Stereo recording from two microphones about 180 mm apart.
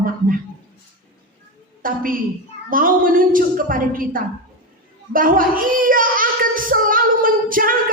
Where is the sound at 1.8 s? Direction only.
50° right (ahead or behind).